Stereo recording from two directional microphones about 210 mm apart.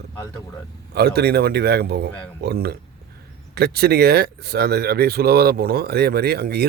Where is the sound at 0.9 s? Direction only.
50° right (ahead or behind).